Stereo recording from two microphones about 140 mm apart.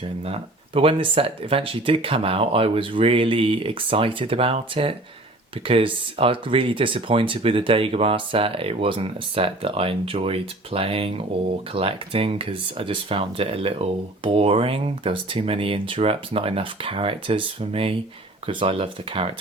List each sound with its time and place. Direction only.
0.0 s speech: 40° right (ahead or behind)